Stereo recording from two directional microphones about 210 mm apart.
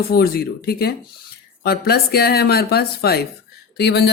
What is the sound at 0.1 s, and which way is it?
Speech, 45° left (ahead or behind).